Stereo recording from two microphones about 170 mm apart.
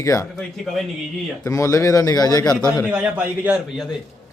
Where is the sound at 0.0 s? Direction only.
20° left (ahead or behind).